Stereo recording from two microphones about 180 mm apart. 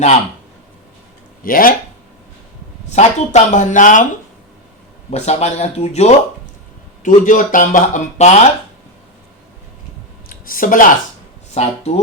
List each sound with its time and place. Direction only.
1.5 s speech: 50° left (ahead or behind)
2.8 s speech: 40° left (ahead or behind)
5.1 s speech: 40° left (ahead or behind)
10.2 s a sound: 50° left (ahead or behind)
11.5 s speech: 35° left (ahead or behind)